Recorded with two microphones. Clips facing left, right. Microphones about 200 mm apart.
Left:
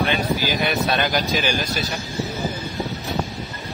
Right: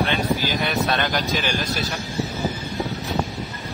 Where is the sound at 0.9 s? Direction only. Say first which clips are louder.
Left 2 dB; centre (ahead or behind).